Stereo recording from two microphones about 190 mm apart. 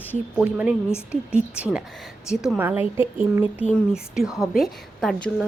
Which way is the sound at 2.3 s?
5° right (ahead or behind).